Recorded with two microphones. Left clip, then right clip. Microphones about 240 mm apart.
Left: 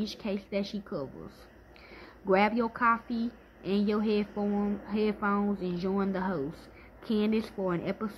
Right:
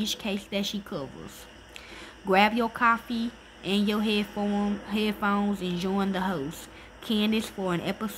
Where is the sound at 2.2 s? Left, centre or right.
Centre.